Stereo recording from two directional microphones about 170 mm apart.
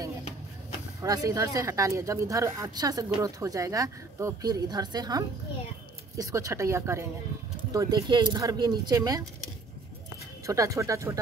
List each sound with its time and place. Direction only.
1.0 s speech: 20° right (ahead or behind)
10.4 s speech: 20° right (ahead or behind)